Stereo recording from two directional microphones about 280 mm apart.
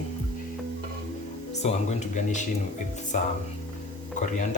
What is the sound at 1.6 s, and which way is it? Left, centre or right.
Speech, left.